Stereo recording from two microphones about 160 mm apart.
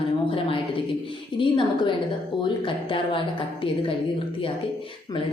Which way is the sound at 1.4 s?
30° left (ahead or behind).